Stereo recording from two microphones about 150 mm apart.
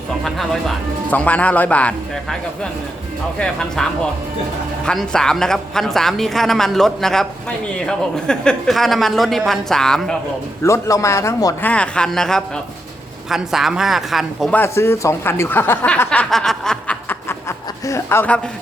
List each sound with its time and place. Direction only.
0.3 s speech: centre (ahead or behind)
3.3 s speech: 5° left (ahead or behind)
4.9 s speech: 5° left (ahead or behind)
10.6 s a man's voice: 20° left (ahead or behind)
11.6 s speech: 10° left (ahead or behind)
14.5 s speech: 15° left (ahead or behind)